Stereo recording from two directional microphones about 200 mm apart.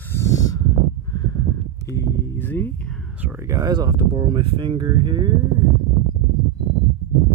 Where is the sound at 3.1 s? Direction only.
10° right (ahead or behind).